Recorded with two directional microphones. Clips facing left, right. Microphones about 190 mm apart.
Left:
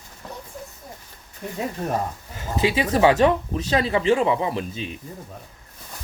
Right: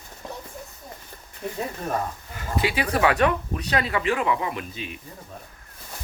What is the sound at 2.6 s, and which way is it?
Speech, 25° left (ahead or behind).